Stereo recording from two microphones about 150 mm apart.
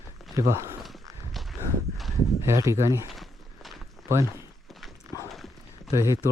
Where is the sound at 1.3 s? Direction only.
Centre (ahead or behind).